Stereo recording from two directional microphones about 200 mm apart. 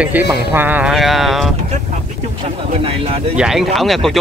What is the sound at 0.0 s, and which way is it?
Speech, 10° right (ahead or behind).